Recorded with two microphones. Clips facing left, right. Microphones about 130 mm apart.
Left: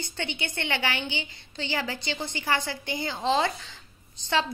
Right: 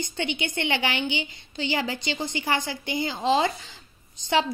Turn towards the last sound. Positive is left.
turn(degrees=-15)  # may be behind; listen again after turning